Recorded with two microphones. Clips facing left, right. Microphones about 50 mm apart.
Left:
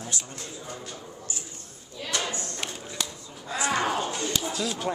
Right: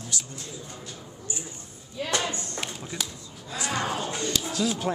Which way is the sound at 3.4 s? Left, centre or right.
Left.